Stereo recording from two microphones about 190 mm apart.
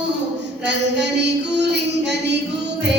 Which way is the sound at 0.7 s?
65° right (ahead or behind).